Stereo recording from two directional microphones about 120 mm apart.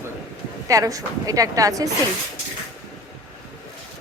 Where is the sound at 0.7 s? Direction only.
30° right (ahead or behind).